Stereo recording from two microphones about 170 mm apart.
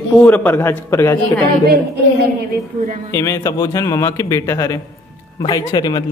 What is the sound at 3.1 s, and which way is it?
A man's voice, 15° left (ahead or behind).